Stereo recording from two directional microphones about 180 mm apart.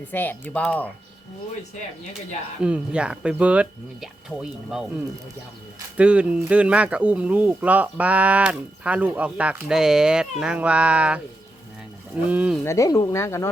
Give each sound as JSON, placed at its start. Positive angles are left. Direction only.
{"t": 0.1, "sound": "speech", "side_deg": 10}
{"t": 2.6, "sound": "speech", "side_deg": -5}
{"t": 12.3, "sound": "speech", "side_deg": -5}
{"t": 12.6, "sound": "speech", "side_deg": 15}